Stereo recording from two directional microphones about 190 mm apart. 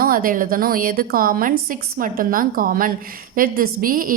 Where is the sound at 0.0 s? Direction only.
50° right (ahead or behind).